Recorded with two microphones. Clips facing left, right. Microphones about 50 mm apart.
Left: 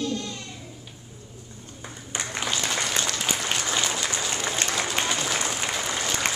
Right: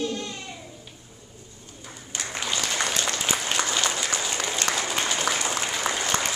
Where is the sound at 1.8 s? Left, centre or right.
Left.